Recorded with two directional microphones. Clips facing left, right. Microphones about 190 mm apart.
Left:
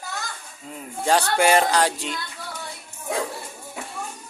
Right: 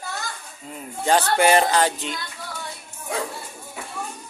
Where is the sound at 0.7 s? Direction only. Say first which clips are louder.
Right 1 dB; centre (ahead or behind).